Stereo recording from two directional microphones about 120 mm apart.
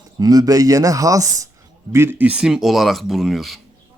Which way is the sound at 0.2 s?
30° right (ahead or behind).